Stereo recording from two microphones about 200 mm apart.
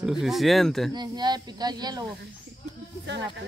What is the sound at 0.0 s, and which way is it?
Speech, centre (ahead or behind).